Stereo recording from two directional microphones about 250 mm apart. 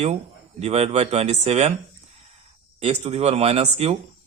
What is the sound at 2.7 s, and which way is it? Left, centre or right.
Speech, right.